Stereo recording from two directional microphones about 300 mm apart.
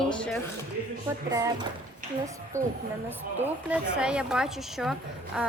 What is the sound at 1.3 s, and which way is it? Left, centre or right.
A woman's voice, centre.